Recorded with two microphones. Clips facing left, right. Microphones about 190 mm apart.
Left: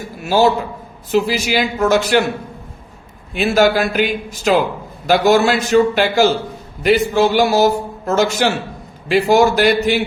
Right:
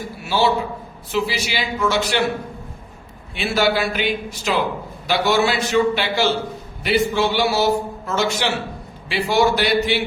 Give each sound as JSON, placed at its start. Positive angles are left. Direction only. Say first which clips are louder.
{"t": 0.3, "sound": "a man's voice", "louder": "left 5 dB", "side_deg": 45}
{"t": 3.3, "sound": "a man's voice", "louder": "left 6 dB", "side_deg": 45}